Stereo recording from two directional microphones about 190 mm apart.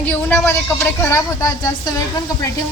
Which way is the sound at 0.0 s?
10° left (ahead or behind).